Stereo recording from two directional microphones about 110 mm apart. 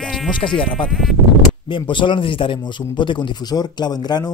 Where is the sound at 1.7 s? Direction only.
50° left (ahead or behind).